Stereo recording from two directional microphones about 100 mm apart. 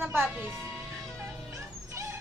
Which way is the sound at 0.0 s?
20° right (ahead or behind).